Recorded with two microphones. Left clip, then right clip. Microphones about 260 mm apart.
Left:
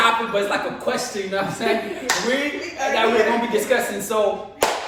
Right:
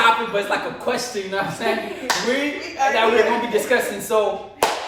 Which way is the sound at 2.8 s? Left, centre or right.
Centre.